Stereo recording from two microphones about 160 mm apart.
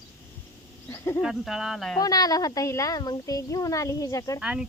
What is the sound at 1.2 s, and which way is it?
Speech, 5° right (ahead or behind).